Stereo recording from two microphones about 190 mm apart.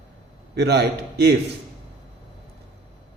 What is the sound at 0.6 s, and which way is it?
Speech, 60° right (ahead or behind).